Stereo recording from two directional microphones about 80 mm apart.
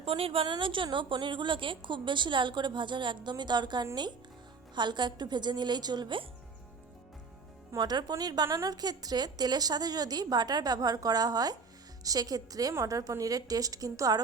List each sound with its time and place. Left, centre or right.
0.4 s a woman's voice: right
7.8 s a woman's voice: right